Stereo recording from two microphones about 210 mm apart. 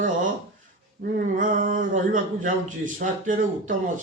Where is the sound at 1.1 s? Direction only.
40° right (ahead or behind).